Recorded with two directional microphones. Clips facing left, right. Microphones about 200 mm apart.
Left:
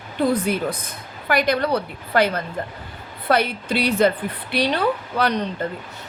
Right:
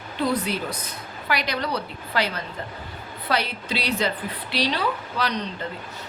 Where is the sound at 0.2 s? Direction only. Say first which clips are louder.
Left 5 dB; 50° left (ahead or behind).